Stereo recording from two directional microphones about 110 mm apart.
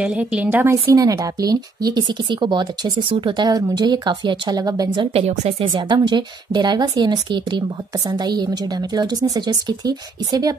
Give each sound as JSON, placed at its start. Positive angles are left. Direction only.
{"t": 0.0, "sound": "a woman's voice", "side_deg": -10}
{"t": 5.1, "sound": "speech", "side_deg": -65}
{"t": 5.7, "sound": "a woman's voice", "side_deg": -45}